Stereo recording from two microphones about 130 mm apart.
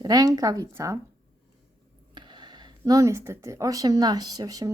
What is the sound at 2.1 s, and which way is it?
Speech, 35° right (ahead or behind).